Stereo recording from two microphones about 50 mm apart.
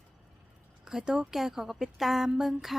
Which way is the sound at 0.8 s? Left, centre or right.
Centre.